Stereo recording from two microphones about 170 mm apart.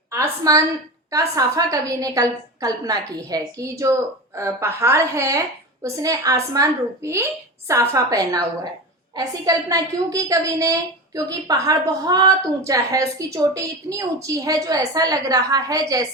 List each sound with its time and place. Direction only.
0.1 s a woman's voice: 20° right (ahead or behind)